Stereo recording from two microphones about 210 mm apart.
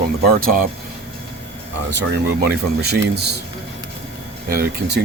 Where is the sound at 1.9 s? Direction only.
55° right (ahead or behind).